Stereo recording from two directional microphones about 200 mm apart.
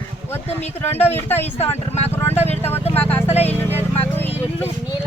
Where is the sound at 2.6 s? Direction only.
10° left (ahead or behind).